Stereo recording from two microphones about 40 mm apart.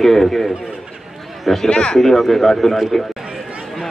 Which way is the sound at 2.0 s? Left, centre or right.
Centre.